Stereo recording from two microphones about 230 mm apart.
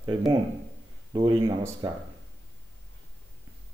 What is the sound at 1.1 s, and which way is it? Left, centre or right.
Speech, centre.